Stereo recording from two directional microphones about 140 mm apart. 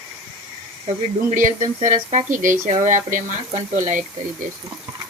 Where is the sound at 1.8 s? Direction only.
60° right (ahead or behind).